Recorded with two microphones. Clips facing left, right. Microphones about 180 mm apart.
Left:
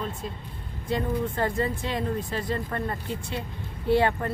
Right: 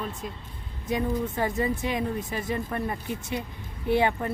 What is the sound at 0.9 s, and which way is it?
Speech, 10° right (ahead or behind).